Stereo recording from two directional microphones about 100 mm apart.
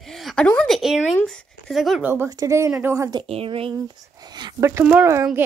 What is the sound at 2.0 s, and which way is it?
Speech, 20° right (ahead or behind).